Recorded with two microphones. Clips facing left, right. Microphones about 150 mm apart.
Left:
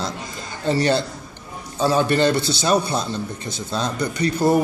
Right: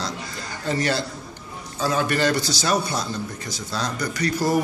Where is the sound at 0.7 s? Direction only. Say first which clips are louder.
Left 5 dB; 30° left (ahead or behind).